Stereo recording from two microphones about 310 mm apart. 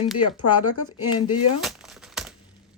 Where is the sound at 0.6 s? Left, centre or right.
Left.